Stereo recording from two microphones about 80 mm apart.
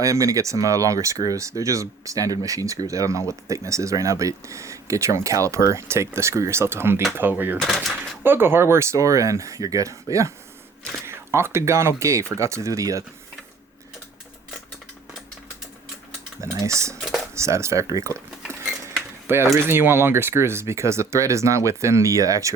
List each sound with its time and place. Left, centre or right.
0.0 s speech: right
7.6 s speech: centre
8.2 s speech: right
16.4 s speech: right
19.3 s speech: right